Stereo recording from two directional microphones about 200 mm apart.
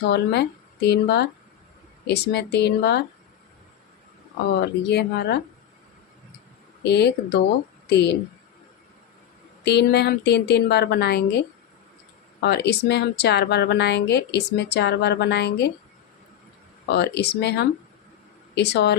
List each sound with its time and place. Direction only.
0.1 s speech: 55° left (ahead or behind)
4.8 s speech: 55° left (ahead or behind)
6.8 s speech: 55° left (ahead or behind)
9.6 s speech: 55° left (ahead or behind)
12.4 s speech: 55° left (ahead or behind)
16.9 s speech: 55° left (ahead or behind)